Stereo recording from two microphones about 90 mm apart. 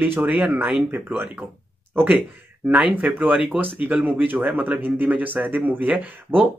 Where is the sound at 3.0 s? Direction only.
10° right (ahead or behind).